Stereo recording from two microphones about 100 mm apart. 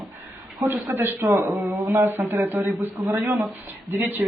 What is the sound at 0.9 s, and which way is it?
Speech, 20° right (ahead or behind).